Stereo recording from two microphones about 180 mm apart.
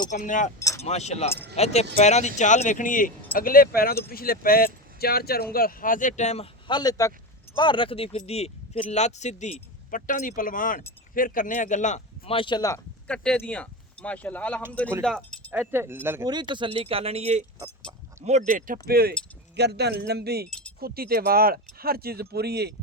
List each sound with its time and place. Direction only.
0.1 s speech: 45° left (ahead or behind); by 12.8 s 20° left (ahead or behind)
13.1 s speech: 5° left (ahead or behind)
15.5 s speech: 10° right (ahead or behind)
16.3 s speech: 25° right (ahead or behind)
17.9 s speech: 25° right (ahead or behind)
18.3 s speech: 40° right (ahead or behind); by 22.7 s 65° right (ahead or behind)